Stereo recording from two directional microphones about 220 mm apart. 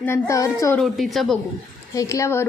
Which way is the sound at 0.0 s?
10° left (ahead or behind).